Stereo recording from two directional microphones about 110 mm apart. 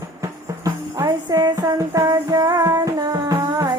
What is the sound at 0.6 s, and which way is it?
Music, 35° right (ahead or behind).